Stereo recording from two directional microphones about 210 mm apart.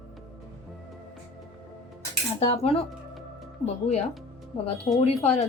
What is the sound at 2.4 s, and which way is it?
Speech, 30° left (ahead or behind).